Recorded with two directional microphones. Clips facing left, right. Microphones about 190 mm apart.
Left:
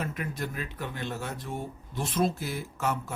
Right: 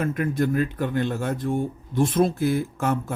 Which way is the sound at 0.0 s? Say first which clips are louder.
Right 10 dB; 50° right (ahead or behind).